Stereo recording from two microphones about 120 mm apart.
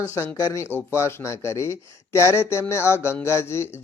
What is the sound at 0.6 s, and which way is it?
Speech, 20° left (ahead or behind).